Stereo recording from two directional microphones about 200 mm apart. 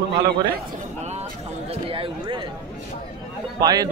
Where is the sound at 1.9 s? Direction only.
25° right (ahead or behind).